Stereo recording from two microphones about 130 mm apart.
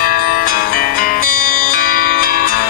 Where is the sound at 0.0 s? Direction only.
90° left.